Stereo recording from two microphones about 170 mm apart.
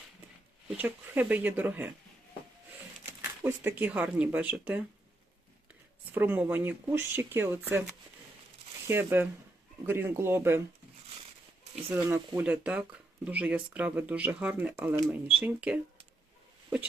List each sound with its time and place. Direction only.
0.8 s speech: 10° right (ahead or behind)
3.2 s speech: 15° right (ahead or behind)
6.1 s speech: 10° right (ahead or behind)
11.9 s speech: 15° right (ahead or behind)